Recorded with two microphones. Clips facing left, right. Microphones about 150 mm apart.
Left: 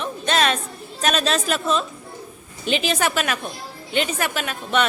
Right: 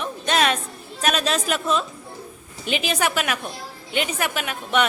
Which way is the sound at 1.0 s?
10° right (ahead or behind).